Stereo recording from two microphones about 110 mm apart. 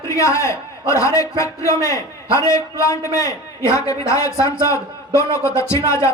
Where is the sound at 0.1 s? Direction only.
30° left (ahead or behind).